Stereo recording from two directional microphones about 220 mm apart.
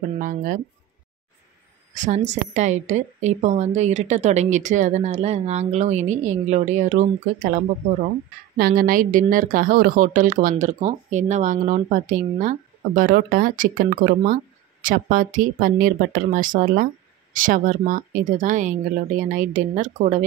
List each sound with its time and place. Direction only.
0.2 s speech: 40° right (ahead or behind)
2.0 s speech: 30° right (ahead or behind)